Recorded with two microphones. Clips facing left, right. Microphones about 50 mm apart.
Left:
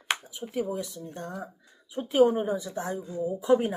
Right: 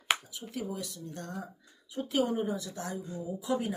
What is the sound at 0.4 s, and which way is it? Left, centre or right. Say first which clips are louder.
Speech: left 7 dB; centre.